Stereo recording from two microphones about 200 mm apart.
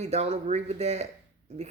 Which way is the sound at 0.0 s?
30° right (ahead or behind).